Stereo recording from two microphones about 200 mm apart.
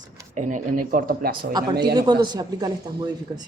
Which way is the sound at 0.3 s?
40° right (ahead or behind).